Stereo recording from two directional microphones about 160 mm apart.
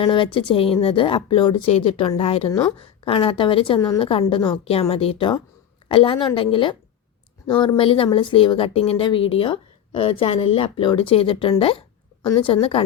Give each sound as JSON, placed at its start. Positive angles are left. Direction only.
{"t": 0.0, "sound": "speech", "side_deg": 30}
{"t": 3.8, "sound": "a woman's voice", "side_deg": 20}
{"t": 4.0, "sound": "speech", "side_deg": 35}